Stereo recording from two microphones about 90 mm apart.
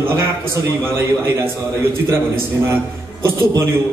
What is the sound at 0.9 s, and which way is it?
Speech, 30° right (ahead or behind).